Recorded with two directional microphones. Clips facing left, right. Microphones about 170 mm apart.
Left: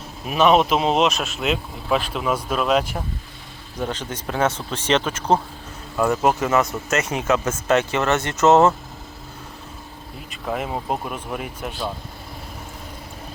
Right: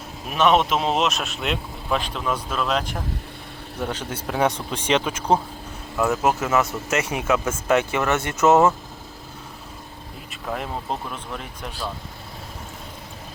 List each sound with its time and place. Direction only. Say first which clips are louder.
0.3 s speech: left 2 dB; centre (ahead or behind)
3.8 s speech: left 1 dB; 10° right (ahead or behind)
10.4 s speech: left 3 dB; 5° left (ahead or behind)